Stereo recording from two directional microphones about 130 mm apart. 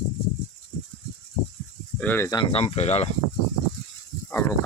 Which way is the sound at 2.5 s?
55° left (ahead or behind).